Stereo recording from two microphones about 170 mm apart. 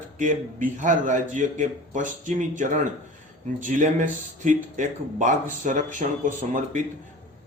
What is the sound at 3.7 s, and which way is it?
A man's voice, 50° right (ahead or behind).